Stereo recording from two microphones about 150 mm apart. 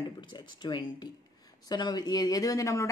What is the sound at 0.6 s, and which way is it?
A woman's voice, 30° left (ahead or behind).